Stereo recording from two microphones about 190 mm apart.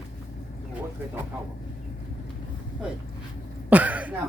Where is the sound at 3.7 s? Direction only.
10° right (ahead or behind).